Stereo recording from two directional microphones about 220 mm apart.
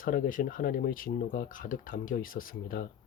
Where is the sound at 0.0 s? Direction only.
40° left (ahead or behind).